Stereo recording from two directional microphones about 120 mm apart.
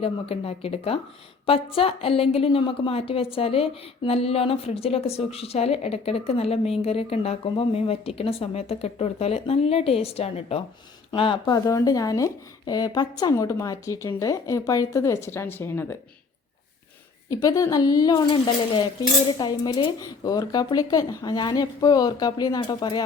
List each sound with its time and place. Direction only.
0.0 s a woman's voice: 55° left (ahead or behind)
11.1 s speech: 45° left (ahead or behind); by 16.0 s 20° left (ahead or behind)
17.2 s speech: 30° left (ahead or behind)